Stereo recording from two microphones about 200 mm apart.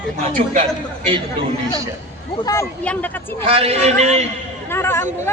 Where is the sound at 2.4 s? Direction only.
15° left (ahead or behind).